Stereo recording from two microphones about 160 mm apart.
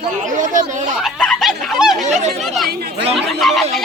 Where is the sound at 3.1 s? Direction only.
Centre (ahead or behind).